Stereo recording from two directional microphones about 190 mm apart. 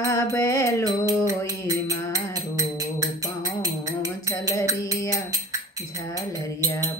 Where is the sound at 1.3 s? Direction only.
15° right (ahead or behind).